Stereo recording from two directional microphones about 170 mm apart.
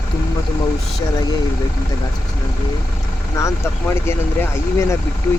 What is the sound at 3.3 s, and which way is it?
Speech, 15° left (ahead or behind).